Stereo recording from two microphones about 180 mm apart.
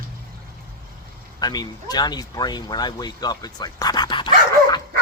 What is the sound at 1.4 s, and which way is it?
Speech, 20° left (ahead or behind).